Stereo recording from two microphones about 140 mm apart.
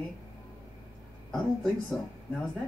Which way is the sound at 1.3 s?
5° left (ahead or behind).